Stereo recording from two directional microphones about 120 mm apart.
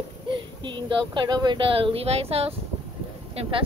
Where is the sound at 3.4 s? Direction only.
45° right (ahead or behind).